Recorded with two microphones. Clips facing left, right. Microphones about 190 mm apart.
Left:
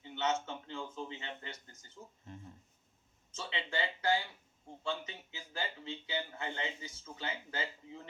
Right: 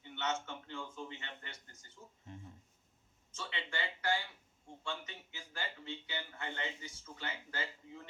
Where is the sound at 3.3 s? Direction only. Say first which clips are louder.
Left 5 dB; 20° left (ahead or behind).